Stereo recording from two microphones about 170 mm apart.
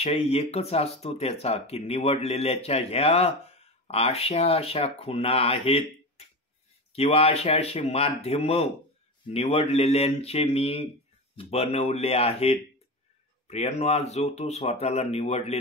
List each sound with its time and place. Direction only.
0.0 s speech: 35° left (ahead or behind)